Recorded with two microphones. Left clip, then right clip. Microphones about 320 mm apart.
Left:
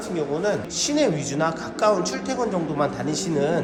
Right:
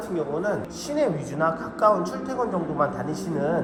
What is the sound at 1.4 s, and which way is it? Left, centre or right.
Speech, left.